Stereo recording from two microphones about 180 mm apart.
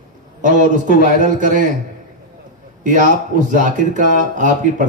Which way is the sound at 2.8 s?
45° right (ahead or behind).